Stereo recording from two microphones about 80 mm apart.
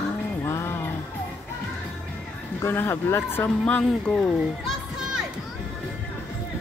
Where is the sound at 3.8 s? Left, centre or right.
Centre.